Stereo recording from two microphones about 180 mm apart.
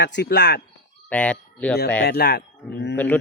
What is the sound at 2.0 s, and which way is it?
Speech, 60° left (ahead or behind).